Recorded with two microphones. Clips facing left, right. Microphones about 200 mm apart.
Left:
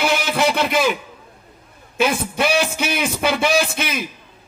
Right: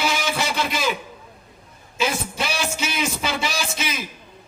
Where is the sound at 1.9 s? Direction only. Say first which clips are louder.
Left 5 dB; 55° left (ahead or behind).